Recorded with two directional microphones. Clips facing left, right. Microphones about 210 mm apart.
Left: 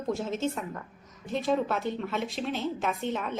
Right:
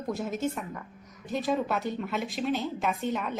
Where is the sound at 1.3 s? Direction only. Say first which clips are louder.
Left 1 dB; centre (ahead or behind).